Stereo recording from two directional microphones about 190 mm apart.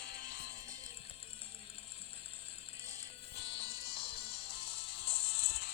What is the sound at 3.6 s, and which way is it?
Music, 30° left (ahead or behind).